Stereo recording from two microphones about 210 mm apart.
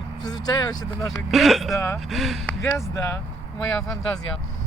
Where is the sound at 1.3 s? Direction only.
Centre (ahead or behind).